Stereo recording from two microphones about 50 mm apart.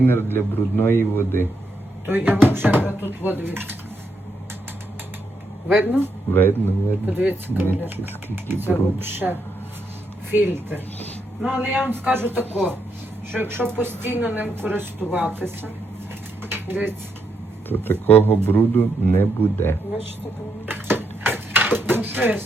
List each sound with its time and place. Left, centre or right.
0.0 s a man's voice: left
2.0 s speech: right
5.8 s speech: right
6.3 s a man's voice: left
7.1 s speech: right
10.3 s speech: right
16.4 s a sound: right
17.7 s a man's voice: left
20.7 s a sound: right
21.2 s dishes: right